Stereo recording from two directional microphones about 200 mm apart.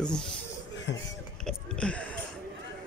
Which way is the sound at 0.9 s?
65° left (ahead or behind).